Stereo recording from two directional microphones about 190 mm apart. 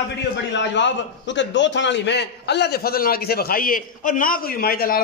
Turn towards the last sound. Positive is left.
turn(degrees=50)  # may be behind; listen again after turning